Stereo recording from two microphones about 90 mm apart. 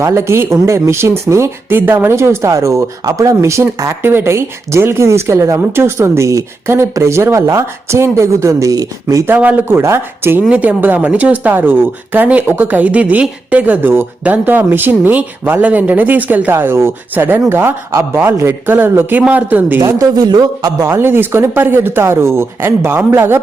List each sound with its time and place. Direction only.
0.0 s speech: 30° right (ahead or behind)
9.2 s speech: 20° right (ahead or behind)
10.5 s speech: 15° right (ahead or behind)
20.0 s a man's voice: 50° right (ahead or behind)
20.8 s speech: 25° right (ahead or behind)